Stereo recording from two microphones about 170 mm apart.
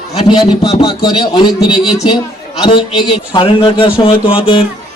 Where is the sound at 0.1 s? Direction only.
35° left (ahead or behind).